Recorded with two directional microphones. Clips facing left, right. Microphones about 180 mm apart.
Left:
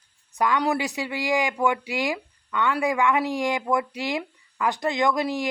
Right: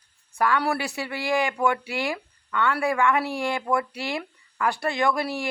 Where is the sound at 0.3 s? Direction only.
15° left (ahead or behind).